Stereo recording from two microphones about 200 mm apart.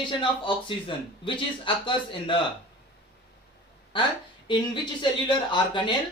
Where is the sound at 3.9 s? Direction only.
25° left (ahead or behind).